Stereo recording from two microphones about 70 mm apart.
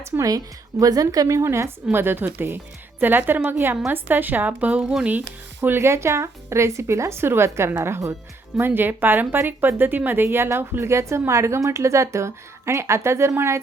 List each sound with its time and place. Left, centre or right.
0.2 s a woman's voice: right
1.5 s a woman's voice: right
5.5 s a woman's voice: right
8.6 s a woman's voice: right